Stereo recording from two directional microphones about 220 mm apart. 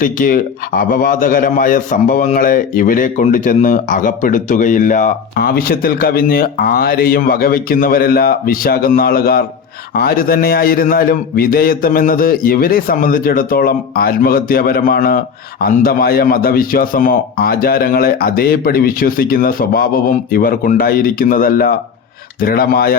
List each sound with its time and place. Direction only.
0.0 s a man's voice: 40° left (ahead or behind)